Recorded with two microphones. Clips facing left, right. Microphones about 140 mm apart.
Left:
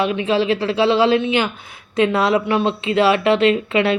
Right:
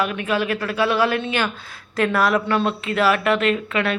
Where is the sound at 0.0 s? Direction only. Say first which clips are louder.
Left 4 dB; 25° left (ahead or behind).